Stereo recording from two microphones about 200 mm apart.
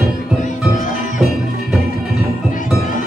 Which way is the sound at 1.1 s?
Centre (ahead or behind).